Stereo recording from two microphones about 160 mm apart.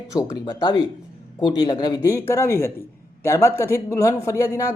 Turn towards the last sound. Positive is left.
turn(degrees=20)  # may be behind; listen again after turning